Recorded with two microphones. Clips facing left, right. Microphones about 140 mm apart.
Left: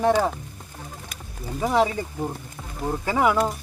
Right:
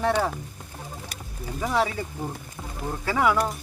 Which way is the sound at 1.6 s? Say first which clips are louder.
Left 4 dB; 20° left (ahead or behind).